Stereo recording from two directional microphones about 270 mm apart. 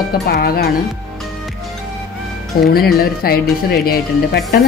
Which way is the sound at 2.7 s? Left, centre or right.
Left.